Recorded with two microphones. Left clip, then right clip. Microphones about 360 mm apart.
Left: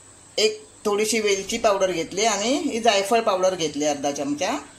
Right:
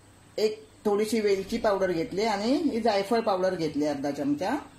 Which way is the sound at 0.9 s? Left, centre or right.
Left.